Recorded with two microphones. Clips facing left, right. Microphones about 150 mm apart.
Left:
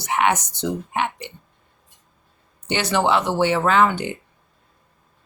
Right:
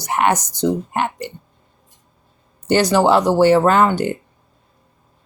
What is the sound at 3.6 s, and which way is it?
Speech, 45° right (ahead or behind).